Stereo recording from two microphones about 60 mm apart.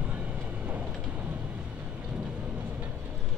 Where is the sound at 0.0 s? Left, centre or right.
Right.